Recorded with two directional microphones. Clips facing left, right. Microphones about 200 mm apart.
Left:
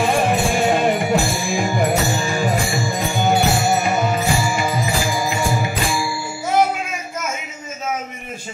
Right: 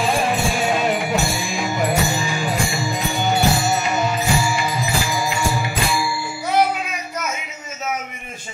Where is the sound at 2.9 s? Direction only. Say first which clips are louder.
Left 4 dB; 50° left (ahead or behind).